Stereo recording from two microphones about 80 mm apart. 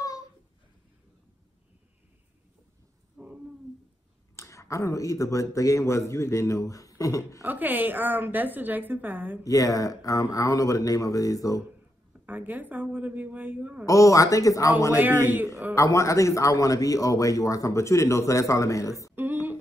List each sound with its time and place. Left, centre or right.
3.2 s a sound: centre
4.4 s a man's voice: left
7.4 s a woman's voice: right
9.4 s speech: left
12.1 s a woman's voice: right
13.8 s speech: left
15.0 s a woman's voice: right
15.7 s a man's voice: left